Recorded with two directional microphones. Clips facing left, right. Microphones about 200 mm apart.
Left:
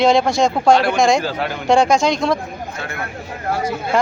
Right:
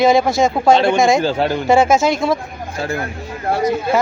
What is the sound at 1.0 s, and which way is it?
Speech, 5° right (ahead or behind).